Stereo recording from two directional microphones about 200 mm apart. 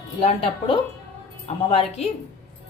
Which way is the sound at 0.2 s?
30° left (ahead or behind).